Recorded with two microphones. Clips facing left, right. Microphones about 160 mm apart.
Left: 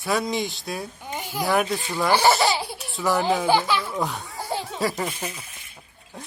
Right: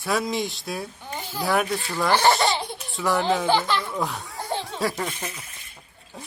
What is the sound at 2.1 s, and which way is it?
Speech, 5° left (ahead or behind).